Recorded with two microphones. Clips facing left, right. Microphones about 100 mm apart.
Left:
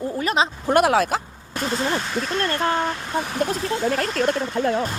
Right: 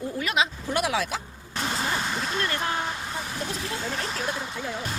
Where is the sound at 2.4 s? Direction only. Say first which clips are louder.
Left 8 dB; 45° left (ahead or behind).